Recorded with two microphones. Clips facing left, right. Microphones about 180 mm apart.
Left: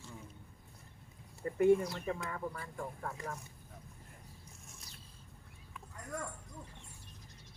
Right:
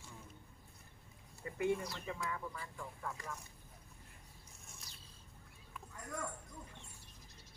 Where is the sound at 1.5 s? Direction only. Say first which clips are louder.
Left 9 dB; 45° left (ahead or behind).